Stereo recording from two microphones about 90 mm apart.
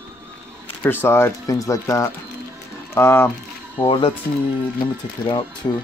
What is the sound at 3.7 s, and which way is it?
Speech, 65° left (ahead or behind).